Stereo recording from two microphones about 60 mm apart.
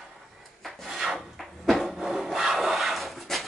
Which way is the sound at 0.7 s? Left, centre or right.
Centre.